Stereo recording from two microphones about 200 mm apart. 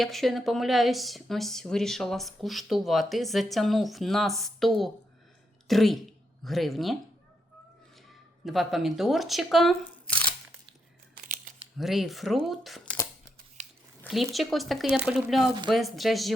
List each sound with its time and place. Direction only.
0.0 s speech: centre (ahead or behind)
8.4 s speech: centre (ahead or behind)
11.8 s speech: centre (ahead or behind)
13.6 s a sound: 35° right (ahead or behind)
14.1 s speech: centre (ahead or behind)